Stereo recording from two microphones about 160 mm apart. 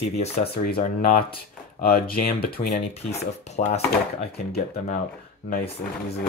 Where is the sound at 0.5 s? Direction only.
70° left (ahead or behind).